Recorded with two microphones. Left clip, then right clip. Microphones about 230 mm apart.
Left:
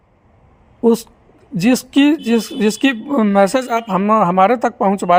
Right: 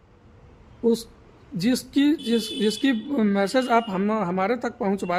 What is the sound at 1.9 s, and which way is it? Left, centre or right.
A man's voice, left.